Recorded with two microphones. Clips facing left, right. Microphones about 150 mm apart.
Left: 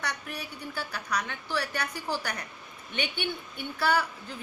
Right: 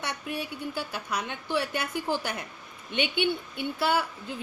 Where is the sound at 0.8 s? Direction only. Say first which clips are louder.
Left 1 dB; 20° right (ahead or behind).